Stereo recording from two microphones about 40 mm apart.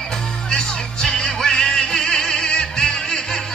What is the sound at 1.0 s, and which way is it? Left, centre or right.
Music, left.